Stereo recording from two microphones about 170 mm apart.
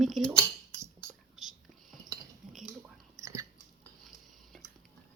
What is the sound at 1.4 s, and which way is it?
Whispering, centre (ahead or behind).